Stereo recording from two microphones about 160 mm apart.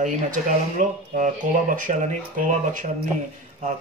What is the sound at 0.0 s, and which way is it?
Speech, 50° right (ahead or behind).